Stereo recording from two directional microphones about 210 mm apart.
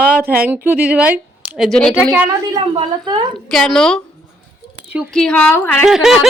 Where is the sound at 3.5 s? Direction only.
Centre (ahead or behind).